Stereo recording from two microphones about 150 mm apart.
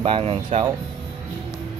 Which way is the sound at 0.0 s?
35° right (ahead or behind).